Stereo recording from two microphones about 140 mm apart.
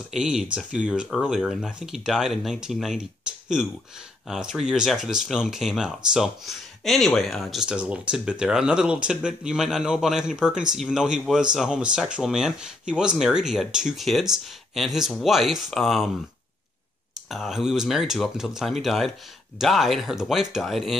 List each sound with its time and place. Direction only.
0.1 s speech: 5° right (ahead or behind)
17.3 s speech: centre (ahead or behind)